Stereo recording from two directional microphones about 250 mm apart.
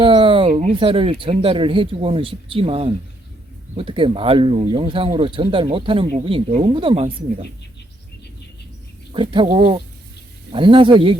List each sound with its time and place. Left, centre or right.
0.0 s speech: centre
9.1 s speech: centre